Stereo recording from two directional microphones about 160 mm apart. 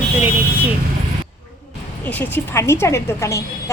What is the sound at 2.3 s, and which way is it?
A woman's voice, 15° left (ahead or behind).